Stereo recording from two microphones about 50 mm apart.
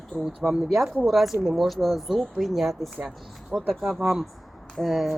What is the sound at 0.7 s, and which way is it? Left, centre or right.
Speech, centre.